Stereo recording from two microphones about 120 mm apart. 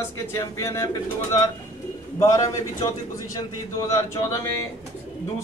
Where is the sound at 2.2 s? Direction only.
30° left (ahead or behind).